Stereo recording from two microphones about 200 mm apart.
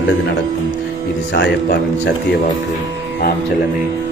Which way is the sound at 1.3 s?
55° left (ahead or behind).